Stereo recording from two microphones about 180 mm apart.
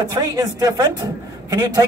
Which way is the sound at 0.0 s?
20° right (ahead or behind).